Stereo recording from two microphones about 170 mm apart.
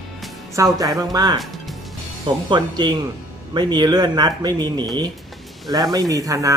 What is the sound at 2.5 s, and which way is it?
Speech, 25° right (ahead or behind).